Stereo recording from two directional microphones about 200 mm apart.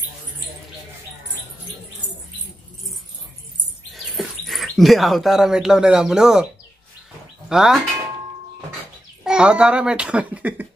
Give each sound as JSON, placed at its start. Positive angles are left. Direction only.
{"t": 3.9, "sound": "speech", "side_deg": 0}
{"t": 7.4, "sound": "speech", "side_deg": 0}
{"t": 9.2, "sound": "a child's voice", "side_deg": -5}